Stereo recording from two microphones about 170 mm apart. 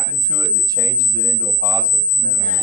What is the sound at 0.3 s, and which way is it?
Speech, 20° right (ahead or behind).